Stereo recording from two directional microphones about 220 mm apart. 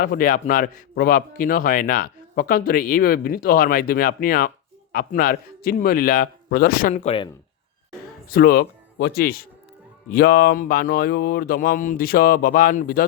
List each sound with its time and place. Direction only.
0.0 s a man's voice: 40° left (ahead or behind)
8.3 s a man's voice: 45° left (ahead or behind)